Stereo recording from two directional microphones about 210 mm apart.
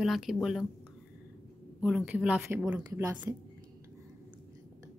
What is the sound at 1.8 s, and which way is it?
Speech, 5° right (ahead or behind).